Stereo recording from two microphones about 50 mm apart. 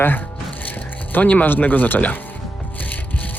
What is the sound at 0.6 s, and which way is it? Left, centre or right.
Music, left.